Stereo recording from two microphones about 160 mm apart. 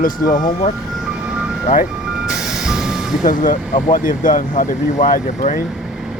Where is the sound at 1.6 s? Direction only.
50° left (ahead or behind).